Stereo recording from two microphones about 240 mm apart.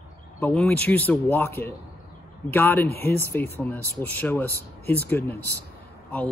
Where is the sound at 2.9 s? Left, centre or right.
Left.